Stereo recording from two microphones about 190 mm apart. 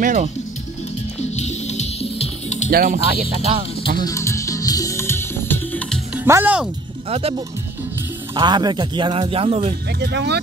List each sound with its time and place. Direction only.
0.0 s speech: 40° right (ahead or behind)
1.2 s music: 35° left (ahead or behind)
2.7 s speech: 50° right (ahead or behind)
3.3 s speech: 30° right (ahead or behind)
4.0 s music: 15° left (ahead or behind)
6.1 s speech: 10° right (ahead or behind)
7.1 s speech: 30° right (ahead or behind)
9.9 s speech: 60° right (ahead or behind)